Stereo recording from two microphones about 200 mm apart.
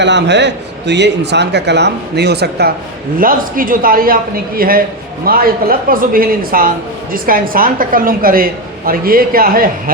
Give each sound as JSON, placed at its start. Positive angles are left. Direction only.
{"t": 0.0, "sound": "a man's voice", "side_deg": -60}